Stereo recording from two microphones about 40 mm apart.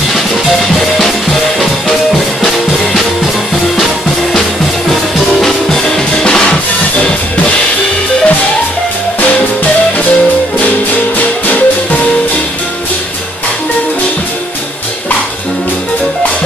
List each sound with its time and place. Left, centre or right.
0.7 s music: centre
2.4 s music: centre
5.4 s music: centre
11.4 s music: left